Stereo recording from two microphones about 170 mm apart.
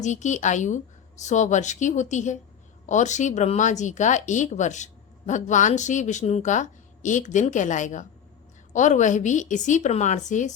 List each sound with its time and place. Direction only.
0.0 s speech: 45° left (ahead or behind)